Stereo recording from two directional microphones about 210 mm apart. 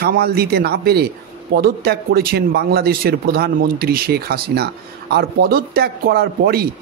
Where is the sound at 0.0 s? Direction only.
45° right (ahead or behind).